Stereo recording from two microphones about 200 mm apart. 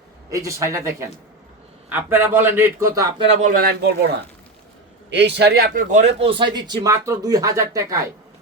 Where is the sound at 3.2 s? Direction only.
40° right (ahead or behind).